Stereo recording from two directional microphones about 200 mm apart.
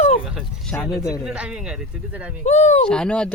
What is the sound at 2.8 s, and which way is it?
Speech, 5° left (ahead or behind).